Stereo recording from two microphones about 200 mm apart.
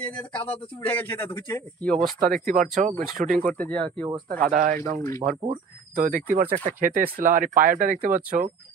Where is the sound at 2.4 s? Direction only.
45° right (ahead or behind).